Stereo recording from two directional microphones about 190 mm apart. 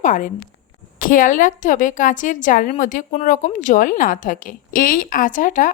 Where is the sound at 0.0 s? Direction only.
40° left (ahead or behind).